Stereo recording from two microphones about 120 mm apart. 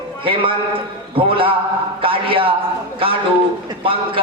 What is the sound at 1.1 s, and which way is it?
A man's voice, 45° right (ahead or behind).